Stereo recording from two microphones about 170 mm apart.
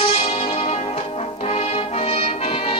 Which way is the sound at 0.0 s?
35° left (ahead or behind).